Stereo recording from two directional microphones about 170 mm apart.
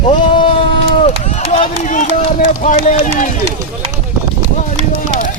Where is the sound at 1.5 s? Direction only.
45° left (ahead or behind).